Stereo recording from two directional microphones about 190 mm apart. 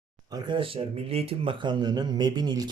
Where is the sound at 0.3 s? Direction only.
25° right (ahead or behind).